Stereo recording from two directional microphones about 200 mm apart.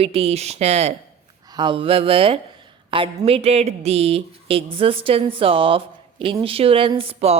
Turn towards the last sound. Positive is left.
turn(degrees=-30)  # may be behind; listen again after turning